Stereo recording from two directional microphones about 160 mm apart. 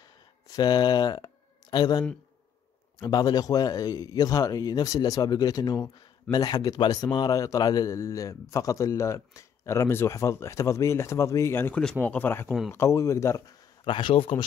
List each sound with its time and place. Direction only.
0.5 s a man's voice: 25° left (ahead or behind)
12.4 s speech: 5° right (ahead or behind)
12.7 s speech: 20° left (ahead or behind)
13.8 s speech: 30° left (ahead or behind)